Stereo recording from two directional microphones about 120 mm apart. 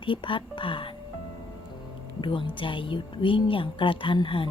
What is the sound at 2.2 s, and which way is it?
A woman's voice, 45° left (ahead or behind).